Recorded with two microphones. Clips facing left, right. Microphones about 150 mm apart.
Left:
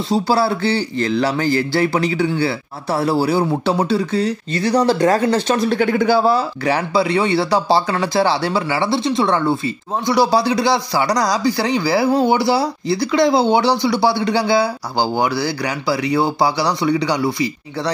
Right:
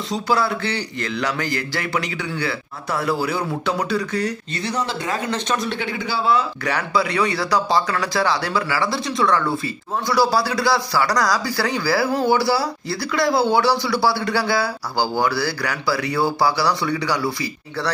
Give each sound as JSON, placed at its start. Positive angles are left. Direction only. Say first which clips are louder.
{"t": 0.1, "sound": "speech", "louder": "left 4 dB", "side_deg": 30}
{"t": 5.8, "sound": "speech", "louder": "left 10 dB", "side_deg": 50}